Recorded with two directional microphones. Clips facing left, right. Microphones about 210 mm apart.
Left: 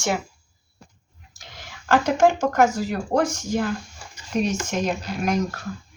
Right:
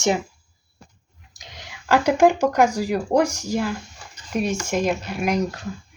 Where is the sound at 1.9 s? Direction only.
10° right (ahead or behind).